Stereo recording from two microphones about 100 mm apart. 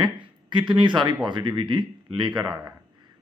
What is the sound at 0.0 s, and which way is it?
Speech, 50° right (ahead or behind).